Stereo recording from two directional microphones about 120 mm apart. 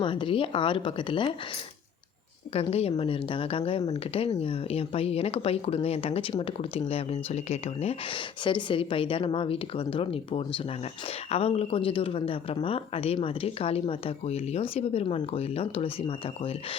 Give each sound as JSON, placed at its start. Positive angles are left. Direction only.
{"t": 0.0, "sound": "speech", "side_deg": 45}
{"t": 2.5, "sound": "speech", "side_deg": 55}
{"t": 15.0, "sound": "speech", "side_deg": 50}